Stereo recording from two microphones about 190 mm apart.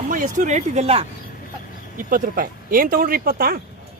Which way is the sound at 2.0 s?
45° right (ahead or behind).